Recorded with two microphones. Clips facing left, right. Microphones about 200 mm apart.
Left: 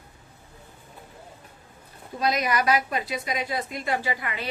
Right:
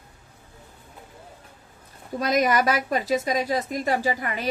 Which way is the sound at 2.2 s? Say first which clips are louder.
Right 3 dB; 45° right (ahead or behind).